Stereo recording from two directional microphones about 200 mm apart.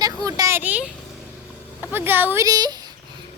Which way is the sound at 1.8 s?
10° right (ahead or behind).